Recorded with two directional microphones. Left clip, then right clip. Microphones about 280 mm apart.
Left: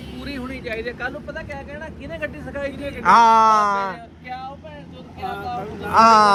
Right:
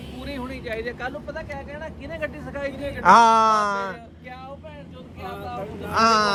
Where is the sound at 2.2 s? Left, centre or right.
Right.